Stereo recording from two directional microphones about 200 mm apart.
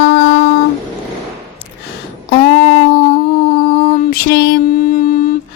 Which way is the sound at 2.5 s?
50° left (ahead or behind).